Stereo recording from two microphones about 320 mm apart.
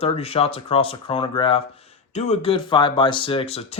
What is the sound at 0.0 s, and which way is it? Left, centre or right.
Speech, centre.